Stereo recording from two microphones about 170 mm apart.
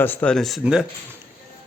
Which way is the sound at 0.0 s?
10° left (ahead or behind).